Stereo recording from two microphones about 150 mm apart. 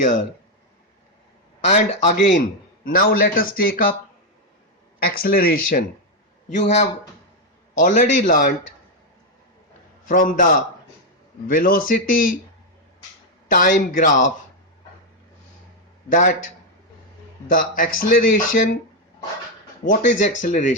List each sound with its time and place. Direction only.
1.7 s speech: 50° left (ahead or behind)
2.8 s a man's voice: 75° left (ahead or behind)
5.0 s speech: 80° left
6.5 s speech: 50° left (ahead or behind); by 8.5 s 70° left (ahead or behind)
10.1 s a man's voice: 65° left (ahead or behind)
13.5 s speech: 60° left (ahead or behind)
16.0 s speech: 60° left (ahead or behind)
17.5 s speech: 65° left (ahead or behind)
19.8 s speech: 55° left (ahead or behind)